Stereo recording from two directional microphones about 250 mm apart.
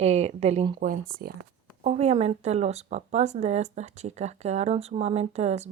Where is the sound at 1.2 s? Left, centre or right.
Right.